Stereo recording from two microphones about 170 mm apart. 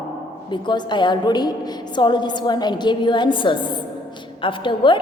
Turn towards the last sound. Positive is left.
turn(degrees=30)  # may be behind; listen again after turning